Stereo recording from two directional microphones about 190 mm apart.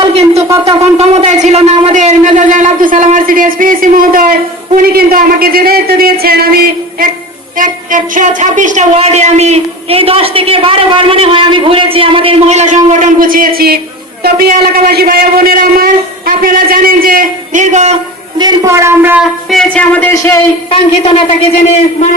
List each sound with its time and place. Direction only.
0.0 s wind instrument: 30° right (ahead or behind)
0.3 s wind instrument: 15° right (ahead or behind)
0.9 s a sound: 35° right (ahead or behind)
4.8 s a man's voice: 50° right (ahead or behind)
14.8 s a man's voice: 55° right (ahead or behind); by 17.9 s 40° right (ahead or behind)
18.3 s speech: 20° right (ahead or behind); by 20.4 s 15° left (ahead or behind)
20.7 s a woman's voice: 30° left (ahead or behind)